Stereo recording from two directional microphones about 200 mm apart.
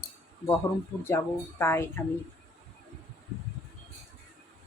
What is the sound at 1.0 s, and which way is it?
A woman's voice, 10° left (ahead or behind).